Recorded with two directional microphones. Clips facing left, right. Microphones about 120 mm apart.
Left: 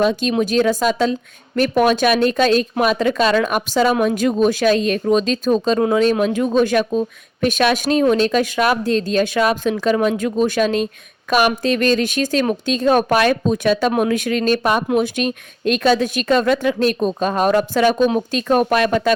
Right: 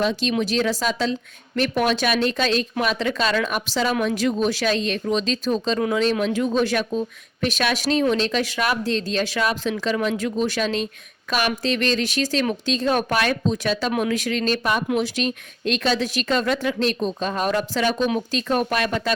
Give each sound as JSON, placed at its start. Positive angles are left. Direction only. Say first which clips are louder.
{"t": 0.0, "sound": "speech", "louder": "left 5 dB", "side_deg": 50}